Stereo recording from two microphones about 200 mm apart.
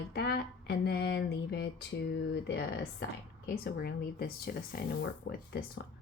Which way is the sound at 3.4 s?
55° left (ahead or behind).